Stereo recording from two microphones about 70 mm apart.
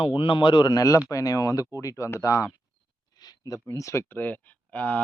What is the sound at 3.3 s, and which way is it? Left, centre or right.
Speech, left.